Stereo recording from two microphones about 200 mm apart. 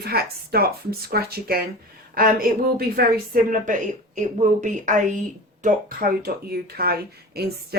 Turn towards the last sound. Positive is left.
turn(degrees=-50)  # may be behind; listen again after turning